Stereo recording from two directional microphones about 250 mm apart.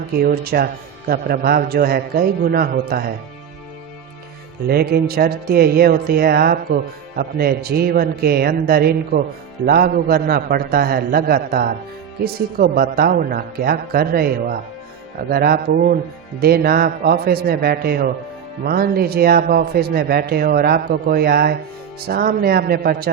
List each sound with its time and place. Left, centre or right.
0.1 s speech: right
4.6 s speech: right